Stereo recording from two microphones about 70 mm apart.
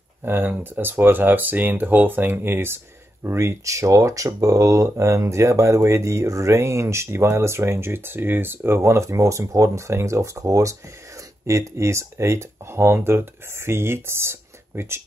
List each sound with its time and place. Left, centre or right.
0.2 s speech: right